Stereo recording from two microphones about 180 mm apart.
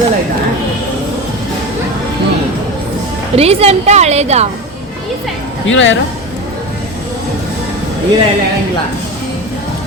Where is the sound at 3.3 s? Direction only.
35° right (ahead or behind).